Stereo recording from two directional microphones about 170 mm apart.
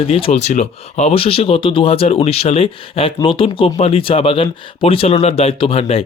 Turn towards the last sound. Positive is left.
turn(degrees=35)  # may be behind; listen again after turning